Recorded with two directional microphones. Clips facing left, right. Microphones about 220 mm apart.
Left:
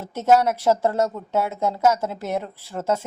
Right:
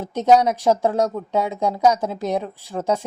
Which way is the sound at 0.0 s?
15° right (ahead or behind).